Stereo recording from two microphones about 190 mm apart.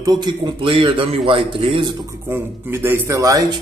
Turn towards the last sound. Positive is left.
turn(degrees=-20)  # may be behind; listen again after turning